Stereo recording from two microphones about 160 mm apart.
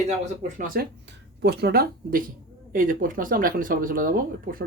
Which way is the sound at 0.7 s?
80° right.